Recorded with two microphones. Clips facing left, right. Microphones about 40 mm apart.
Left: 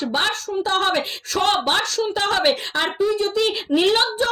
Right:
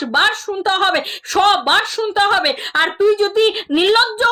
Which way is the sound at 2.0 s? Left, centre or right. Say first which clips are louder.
Right 5 dB; right.